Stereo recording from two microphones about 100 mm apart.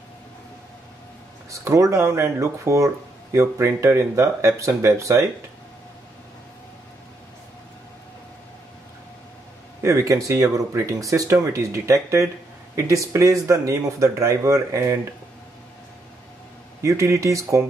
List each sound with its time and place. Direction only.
1.5 s speech: 30° right (ahead or behind)
9.8 s speech: 30° right (ahead or behind)
16.8 s speech: 30° right (ahead or behind)